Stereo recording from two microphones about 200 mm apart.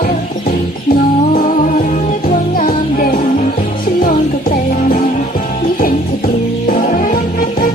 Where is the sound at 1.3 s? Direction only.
45° left (ahead or behind).